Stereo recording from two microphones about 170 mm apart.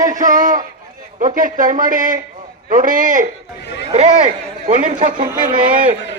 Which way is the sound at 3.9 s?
35° right (ahead or behind).